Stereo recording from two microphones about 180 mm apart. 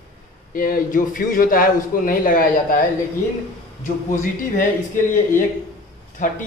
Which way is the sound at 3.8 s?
45° left (ahead or behind).